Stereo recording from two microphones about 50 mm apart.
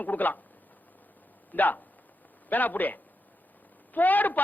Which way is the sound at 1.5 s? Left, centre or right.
Left.